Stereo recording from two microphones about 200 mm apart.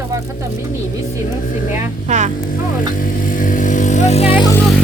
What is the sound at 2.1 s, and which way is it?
Speech, 35° right (ahead or behind).